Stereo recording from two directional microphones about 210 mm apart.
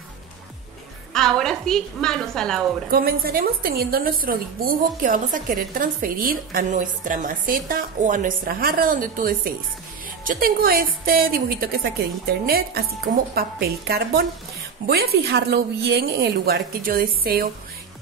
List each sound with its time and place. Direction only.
1.1 s a woman's voice: centre (ahead or behind)
2.9 s a woman's voice: 45° right (ahead or behind)